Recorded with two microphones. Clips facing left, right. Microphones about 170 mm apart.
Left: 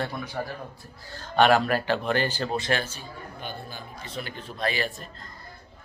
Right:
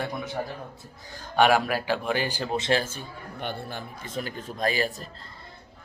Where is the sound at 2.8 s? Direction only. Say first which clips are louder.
Right 1 dB; 50° right (ahead or behind); by 3.8 s 70° right (ahead or behind).